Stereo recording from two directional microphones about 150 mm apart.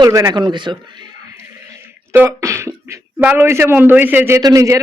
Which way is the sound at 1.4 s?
15° right (ahead or behind).